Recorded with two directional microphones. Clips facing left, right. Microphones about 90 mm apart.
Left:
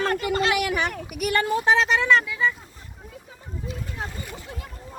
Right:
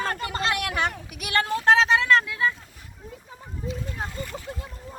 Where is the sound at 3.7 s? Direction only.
5° left (ahead or behind).